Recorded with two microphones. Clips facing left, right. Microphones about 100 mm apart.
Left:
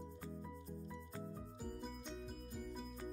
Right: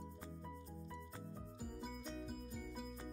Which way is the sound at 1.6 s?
5° right (ahead or behind).